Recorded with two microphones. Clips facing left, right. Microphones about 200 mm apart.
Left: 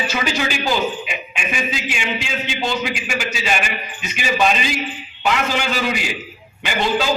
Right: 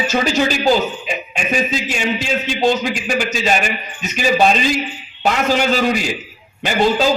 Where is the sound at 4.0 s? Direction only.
35° right (ahead or behind).